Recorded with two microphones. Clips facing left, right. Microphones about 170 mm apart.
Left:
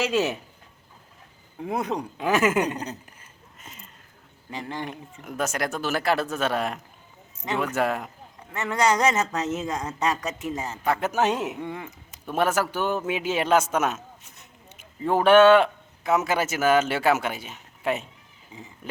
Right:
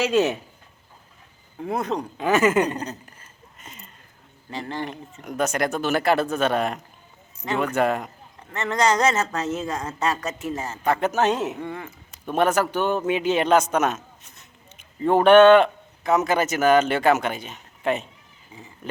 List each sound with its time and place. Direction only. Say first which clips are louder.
0.1 s speech: right 4 dB; 5° left (ahead or behind)
1.6 s speech: right 2 dB; 10° left (ahead or behind)
3.6 s a sound: right 2 dB; centre (ahead or behind)
4.5 s speech: right 3 dB; 10° left (ahead or behind)
10.8 s a man's voice: right 3 dB; 5° left (ahead or behind)